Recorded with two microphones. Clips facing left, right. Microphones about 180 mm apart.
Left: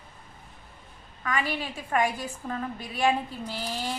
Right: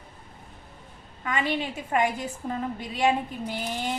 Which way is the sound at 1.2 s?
25° right (ahead or behind).